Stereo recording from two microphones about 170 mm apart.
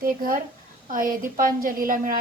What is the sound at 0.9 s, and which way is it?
A woman's voice, 55° right (ahead or behind).